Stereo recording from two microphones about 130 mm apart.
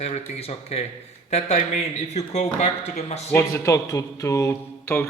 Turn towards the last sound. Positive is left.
turn(degrees=20)  # may be behind; listen again after turning